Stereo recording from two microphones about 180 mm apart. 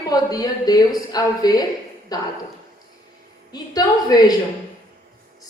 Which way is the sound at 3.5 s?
20° left (ahead or behind).